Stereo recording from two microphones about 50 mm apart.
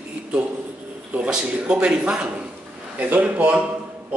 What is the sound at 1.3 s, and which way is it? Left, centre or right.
Speech, centre.